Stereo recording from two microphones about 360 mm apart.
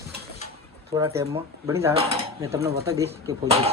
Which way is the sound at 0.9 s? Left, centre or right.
Centre.